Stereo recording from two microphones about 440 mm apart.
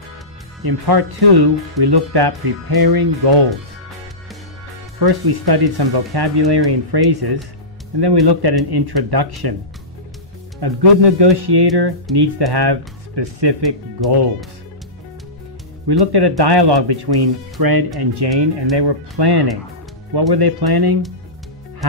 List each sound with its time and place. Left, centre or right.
0.6 s speech: right
4.9 s speech: right
10.6 s speech: right
15.9 s speech: right